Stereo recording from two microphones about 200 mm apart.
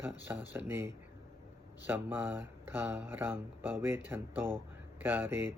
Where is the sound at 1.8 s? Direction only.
10° right (ahead or behind).